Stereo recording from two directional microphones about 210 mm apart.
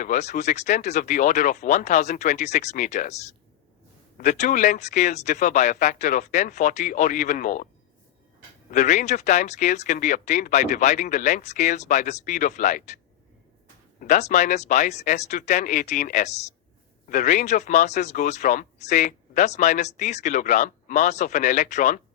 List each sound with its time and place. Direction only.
0.0 s speech: 35° left (ahead or behind)
8.7 s speech: 35° left (ahead or behind)
14.0 s speech: 35° left (ahead or behind)